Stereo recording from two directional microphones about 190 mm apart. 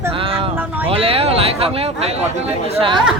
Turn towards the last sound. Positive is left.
turn(degrees=-25)  # may be behind; listen again after turning